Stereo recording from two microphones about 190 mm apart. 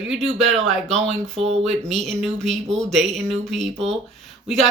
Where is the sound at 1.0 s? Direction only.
35° right (ahead or behind).